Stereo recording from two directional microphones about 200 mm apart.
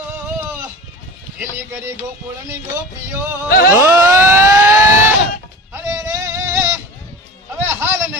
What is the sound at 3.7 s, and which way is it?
Vehicle, 15° right (ahead or behind).